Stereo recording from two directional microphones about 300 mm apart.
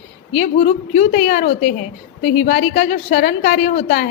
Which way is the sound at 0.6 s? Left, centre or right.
Left.